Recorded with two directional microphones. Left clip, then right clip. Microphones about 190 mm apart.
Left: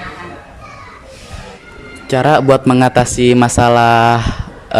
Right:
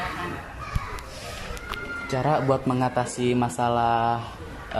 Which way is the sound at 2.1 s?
50° left (ahead or behind).